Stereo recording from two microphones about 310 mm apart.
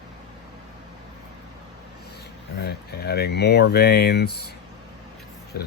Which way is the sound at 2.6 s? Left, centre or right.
Left.